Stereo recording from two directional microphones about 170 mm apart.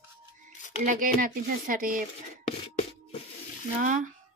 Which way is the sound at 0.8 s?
55° right (ahead or behind).